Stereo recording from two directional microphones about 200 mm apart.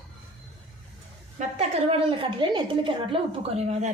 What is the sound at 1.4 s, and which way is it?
A woman's voice, 30° right (ahead or behind).